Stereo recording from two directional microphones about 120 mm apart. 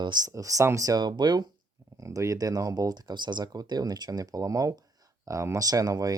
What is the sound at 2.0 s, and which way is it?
Speech, 25° right (ahead or behind).